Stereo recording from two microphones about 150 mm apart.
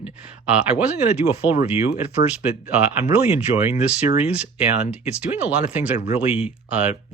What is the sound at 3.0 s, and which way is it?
Speech, 45° left (ahead or behind).